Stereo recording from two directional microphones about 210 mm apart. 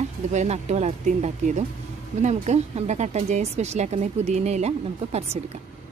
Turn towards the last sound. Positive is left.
turn(degrees=-30)  # may be behind; listen again after turning